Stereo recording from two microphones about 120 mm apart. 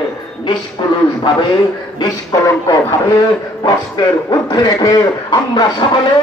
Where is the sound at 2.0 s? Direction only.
35° left (ahead or behind).